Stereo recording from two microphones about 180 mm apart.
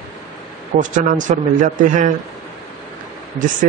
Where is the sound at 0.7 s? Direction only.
45° right (ahead or behind).